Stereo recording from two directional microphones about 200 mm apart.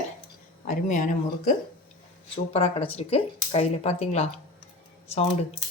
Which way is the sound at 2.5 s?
30° left (ahead or behind).